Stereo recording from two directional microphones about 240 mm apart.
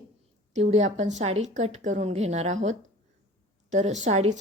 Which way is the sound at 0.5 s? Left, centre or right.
Right.